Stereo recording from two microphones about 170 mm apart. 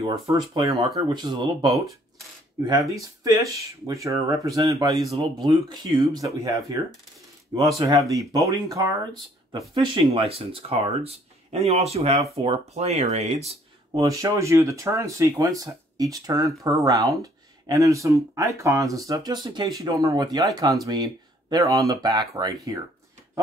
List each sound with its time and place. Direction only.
0.0 s speech: 25° right (ahead or behind)
2.9 s speech: 20° right (ahead or behind); by 13.6 s 40° right (ahead or behind)
13.9 s speech: 20° right (ahead or behind)